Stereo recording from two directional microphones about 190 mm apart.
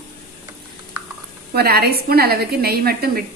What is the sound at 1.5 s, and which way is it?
A woman's voice, 55° right (ahead or behind).